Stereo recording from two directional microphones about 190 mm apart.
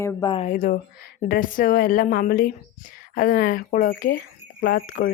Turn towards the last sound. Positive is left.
turn(degrees=50)  # may be behind; listen again after turning